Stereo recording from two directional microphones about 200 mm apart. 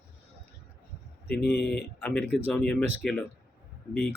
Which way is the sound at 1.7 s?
5° left (ahead or behind).